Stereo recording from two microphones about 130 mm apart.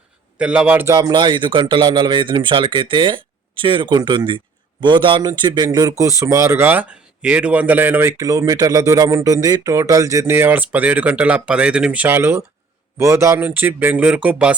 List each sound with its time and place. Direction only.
0.3 s speech: 10° right (ahead or behind)
0.9 s speech: 30° right (ahead or behind)
8.2 s speech: 25° right (ahead or behind); by 14.5 s 10° right (ahead or behind)